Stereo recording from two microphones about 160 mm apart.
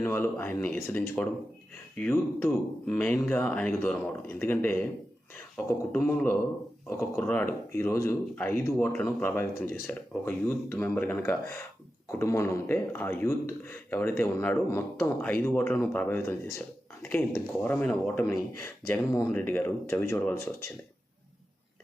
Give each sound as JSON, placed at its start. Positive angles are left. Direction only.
{"t": 0.0, "sound": "a man's voice", "side_deg": 15}